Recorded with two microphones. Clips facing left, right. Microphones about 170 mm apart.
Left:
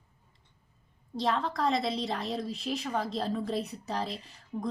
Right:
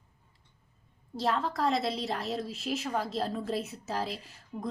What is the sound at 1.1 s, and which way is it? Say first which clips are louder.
A woman's voice: even; centre (ahead or behind).